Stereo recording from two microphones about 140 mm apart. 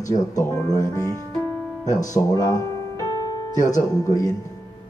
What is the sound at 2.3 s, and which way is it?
Music, 25° left (ahead or behind).